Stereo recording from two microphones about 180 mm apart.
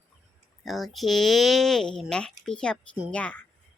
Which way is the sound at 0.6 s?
Centre (ahead or behind).